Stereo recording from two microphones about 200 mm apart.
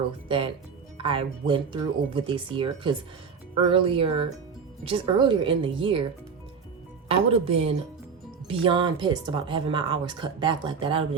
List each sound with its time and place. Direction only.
0.3 s speech: 25° right (ahead or behind)
7.1 s speech: 30° right (ahead or behind)